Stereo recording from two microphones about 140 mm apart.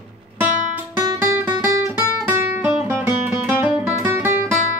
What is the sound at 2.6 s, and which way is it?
Music, 10° right (ahead or behind).